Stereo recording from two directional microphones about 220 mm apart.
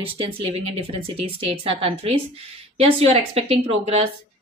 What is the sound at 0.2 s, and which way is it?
A woman's voice, 25° right (ahead or behind).